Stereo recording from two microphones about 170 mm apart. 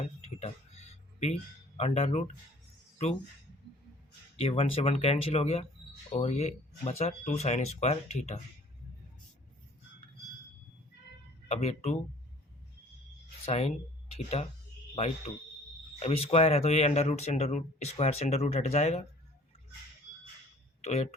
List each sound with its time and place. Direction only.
0.0 s a sound: 40° left (ahead or behind)
4.4 s speech: 35° left (ahead or behind)
11.4 s speech: 40° left (ahead or behind)
13.4 s speech: 40° left (ahead or behind)
20.8 s speech: 40° left (ahead or behind)